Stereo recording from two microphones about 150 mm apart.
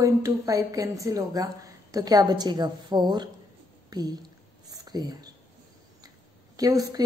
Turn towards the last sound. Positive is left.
turn(degrees=-25)  # may be behind; listen again after turning